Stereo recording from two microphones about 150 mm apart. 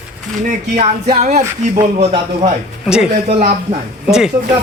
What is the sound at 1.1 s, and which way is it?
Music, 50° right (ahead or behind).